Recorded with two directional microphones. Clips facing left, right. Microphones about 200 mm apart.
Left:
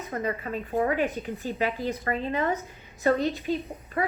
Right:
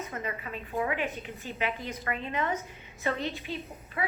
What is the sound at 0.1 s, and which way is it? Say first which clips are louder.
A woman's voice: left 7 dB; 40° left (ahead or behind).